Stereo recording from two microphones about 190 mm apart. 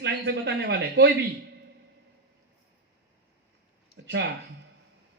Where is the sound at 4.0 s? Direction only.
75° right (ahead or behind).